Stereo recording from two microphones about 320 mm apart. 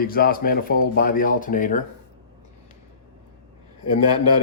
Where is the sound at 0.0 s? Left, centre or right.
Left.